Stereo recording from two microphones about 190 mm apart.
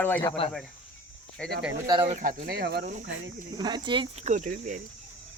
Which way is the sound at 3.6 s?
20° right (ahead or behind).